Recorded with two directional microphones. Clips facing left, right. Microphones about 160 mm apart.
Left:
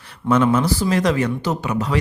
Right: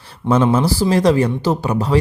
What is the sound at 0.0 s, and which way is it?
Speech, 30° right (ahead or behind).